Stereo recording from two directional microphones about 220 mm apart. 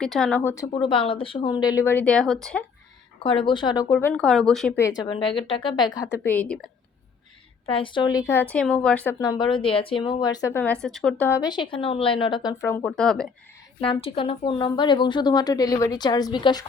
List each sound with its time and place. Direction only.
0.0 s speech: centre (ahead or behind)
3.2 s a woman's voice: 20° left (ahead or behind)
3.9 s speech: 5° left (ahead or behind)
4.9 s a woman's voice: 20° left (ahead or behind); by 6.7 s 5° left (ahead or behind)
7.7 s speech: 25° left (ahead or behind); by 13.3 s centre (ahead or behind)
13.8 s a woman's voice: 25° left (ahead or behind)